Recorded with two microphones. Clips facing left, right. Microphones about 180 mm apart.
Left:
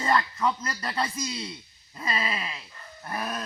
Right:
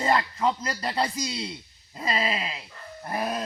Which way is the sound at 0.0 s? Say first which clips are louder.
Right 1 dB; 25° right (ahead or behind).